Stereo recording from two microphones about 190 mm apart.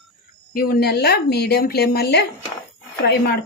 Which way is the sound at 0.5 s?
50° left (ahead or behind).